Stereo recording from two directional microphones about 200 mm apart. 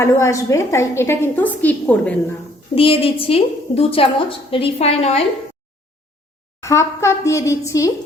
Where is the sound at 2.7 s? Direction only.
25° left (ahead or behind).